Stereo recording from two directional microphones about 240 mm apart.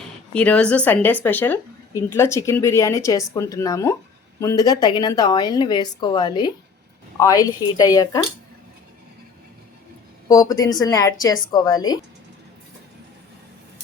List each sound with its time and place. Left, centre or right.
0.3 s speech: centre
10.2 s speech: centre